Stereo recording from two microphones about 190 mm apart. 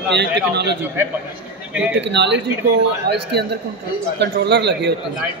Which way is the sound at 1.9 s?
65° right (ahead or behind).